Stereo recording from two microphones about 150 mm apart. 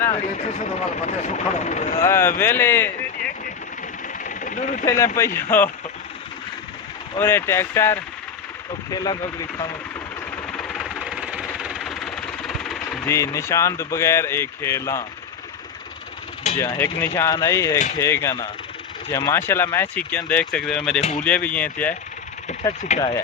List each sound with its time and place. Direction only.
0.2 s speech: 50° left (ahead or behind)
2.0 s speech: 15° left (ahead or behind)
4.2 s vehicle: 60° left (ahead or behind)
4.9 s speech: 20° left (ahead or behind)
7.2 s speech: 15° left (ahead or behind)
10.6 s a sound: centre (ahead or behind)
11.6 s vehicle: 5° right (ahead or behind)
13.1 s speech: 20° left (ahead or behind)
16.6 s speech: 15° left (ahead or behind)
22.8 s speech: 50° left (ahead or behind)